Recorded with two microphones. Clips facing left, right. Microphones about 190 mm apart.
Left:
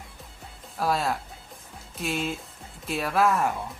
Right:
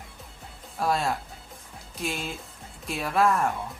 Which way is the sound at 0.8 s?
Centre (ahead or behind).